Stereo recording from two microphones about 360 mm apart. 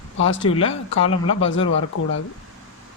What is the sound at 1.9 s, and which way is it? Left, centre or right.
Speech, left.